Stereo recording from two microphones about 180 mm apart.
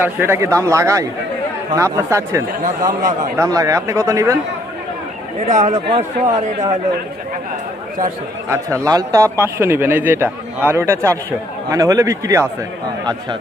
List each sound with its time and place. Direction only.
0.0 s a man's voice: 15° right (ahead or behind)
5.5 s a man's voice: 40° right (ahead or behind)
8.4 s a man's voice: 15° right (ahead or behind)